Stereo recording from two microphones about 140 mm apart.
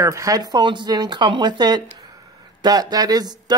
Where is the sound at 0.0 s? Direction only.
20° right (ahead or behind).